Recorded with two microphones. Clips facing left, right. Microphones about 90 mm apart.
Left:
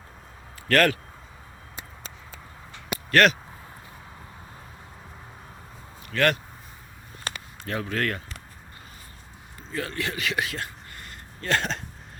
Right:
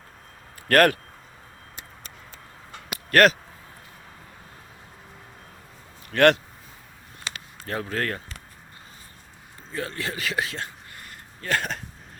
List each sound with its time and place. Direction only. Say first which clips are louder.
0.7 s speech: right 3 dB; 50° right (ahead or behind)
2.7 s a sound: right 2 dB; 45° right (ahead or behind)
6.1 s speech: right 6 dB; 65° right (ahead or behind)
7.3 s a sound: left 2 dB; 45° left (ahead or behind)
7.7 s a man's voice: even; 35° right (ahead or behind)
9.7 s a man's voice: left 1 dB; 30° right (ahead or behind)
11.4 s speech: left 1 dB; 10° right (ahead or behind)